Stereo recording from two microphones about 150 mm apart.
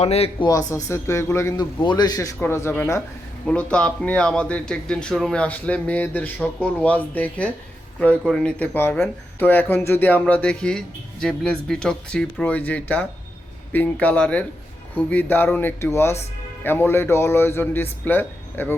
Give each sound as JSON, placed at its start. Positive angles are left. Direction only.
{"t": 0.0, "sound": "speech", "side_deg": 45}
{"t": 0.4, "sound": "a man's voice", "side_deg": 20}
{"t": 3.4, "sound": "speech", "side_deg": 5}